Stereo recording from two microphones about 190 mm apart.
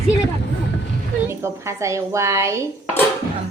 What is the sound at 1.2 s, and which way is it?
Speech, 15° right (ahead or behind).